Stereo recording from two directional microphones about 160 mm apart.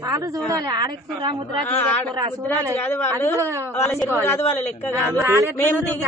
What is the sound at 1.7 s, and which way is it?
A man's voice, 10° left (ahead or behind).